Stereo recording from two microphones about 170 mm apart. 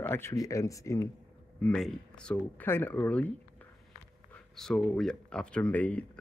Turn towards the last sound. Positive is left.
turn(degrees=10)  # may be behind; listen again after turning